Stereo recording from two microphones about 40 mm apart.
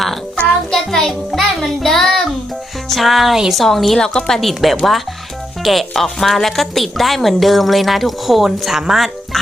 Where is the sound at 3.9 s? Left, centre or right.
Centre.